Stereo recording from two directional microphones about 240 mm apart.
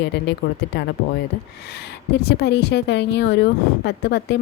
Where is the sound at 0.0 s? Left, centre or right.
Left.